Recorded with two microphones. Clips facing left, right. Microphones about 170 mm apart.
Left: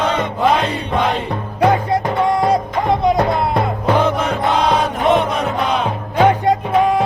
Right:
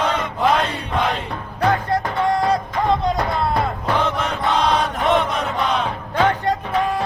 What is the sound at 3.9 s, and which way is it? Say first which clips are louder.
Music: left 4 dB; centre (ahead or behind).